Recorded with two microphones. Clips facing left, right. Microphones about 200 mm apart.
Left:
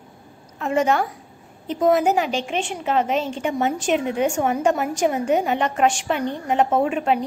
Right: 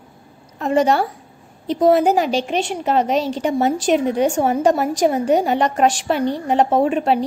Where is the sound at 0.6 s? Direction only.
35° right (ahead or behind).